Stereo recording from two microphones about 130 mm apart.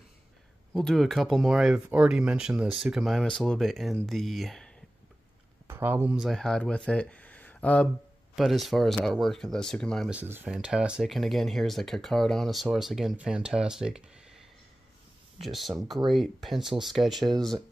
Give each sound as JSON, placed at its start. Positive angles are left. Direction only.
{"t": 0.7, "sound": "speech", "side_deg": 0}
{"t": 5.7, "sound": "speech", "side_deg": -15}
{"t": 6.1, "sound": "speech", "side_deg": 0}
{"t": 8.4, "sound": "speech", "side_deg": 0}
{"t": 10.0, "sound": "speech", "side_deg": -15}
{"t": 15.4, "sound": "speech", "side_deg": 0}